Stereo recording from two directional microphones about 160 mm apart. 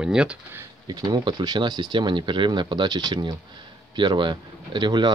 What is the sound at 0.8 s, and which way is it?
Speech, 25° right (ahead or behind).